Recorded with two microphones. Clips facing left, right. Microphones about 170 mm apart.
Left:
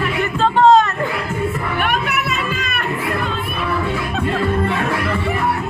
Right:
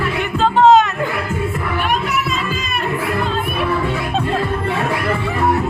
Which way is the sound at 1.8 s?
60° left (ahead or behind).